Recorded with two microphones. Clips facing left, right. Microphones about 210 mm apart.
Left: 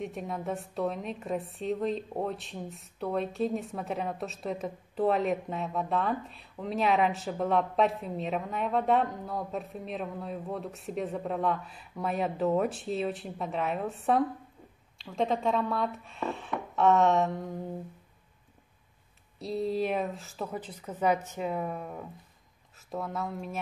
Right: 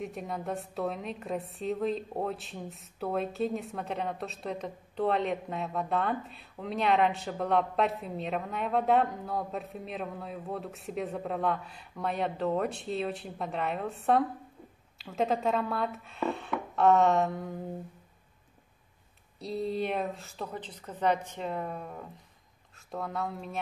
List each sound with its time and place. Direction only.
0.0 s a woman's voice: centre (ahead or behind)
19.4 s a woman's voice: centre (ahead or behind)